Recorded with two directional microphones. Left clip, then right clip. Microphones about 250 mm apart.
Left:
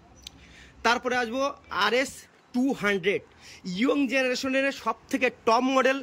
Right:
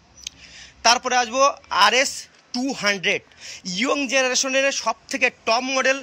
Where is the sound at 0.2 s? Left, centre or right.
Centre.